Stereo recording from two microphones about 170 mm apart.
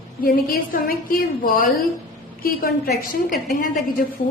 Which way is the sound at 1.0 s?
55° left (ahead or behind).